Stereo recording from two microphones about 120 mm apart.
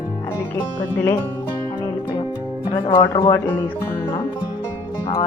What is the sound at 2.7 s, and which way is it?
Speech, 50° left (ahead or behind).